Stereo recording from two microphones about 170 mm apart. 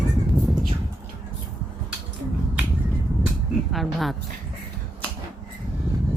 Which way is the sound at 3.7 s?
Centre (ahead or behind).